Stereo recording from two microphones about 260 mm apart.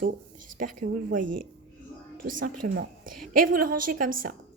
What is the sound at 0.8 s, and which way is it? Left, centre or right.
Speech, right.